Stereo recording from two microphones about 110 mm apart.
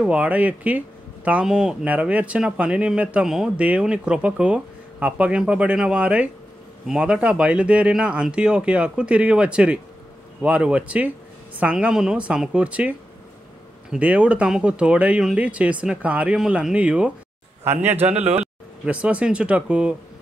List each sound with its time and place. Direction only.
0.0 s speech: 10° right (ahead or behind)
17.9 s a man's voice: 70° right (ahead or behind)
18.4 s speech: 10° right (ahead or behind)